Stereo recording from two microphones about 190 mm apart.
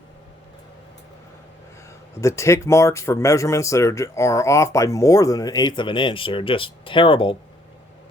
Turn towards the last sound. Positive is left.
turn(degrees=25)  # may be behind; listen again after turning